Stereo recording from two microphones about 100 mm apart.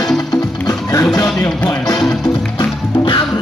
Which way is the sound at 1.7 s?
35° left (ahead or behind).